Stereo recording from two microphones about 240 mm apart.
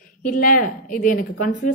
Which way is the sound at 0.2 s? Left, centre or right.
Left.